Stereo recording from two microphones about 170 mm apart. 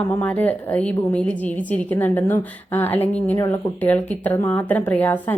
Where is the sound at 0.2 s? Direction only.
10° left (ahead or behind).